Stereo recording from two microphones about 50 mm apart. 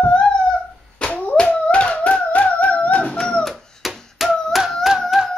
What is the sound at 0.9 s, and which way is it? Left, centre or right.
Dog, left.